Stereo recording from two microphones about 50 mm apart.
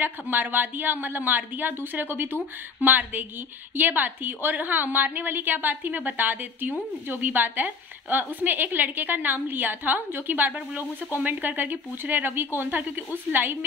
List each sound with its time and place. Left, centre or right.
0.0 s a woman's voice: right